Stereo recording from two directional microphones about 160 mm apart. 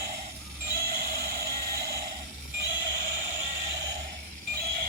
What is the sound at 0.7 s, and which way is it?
Music, 70° right (ahead or behind).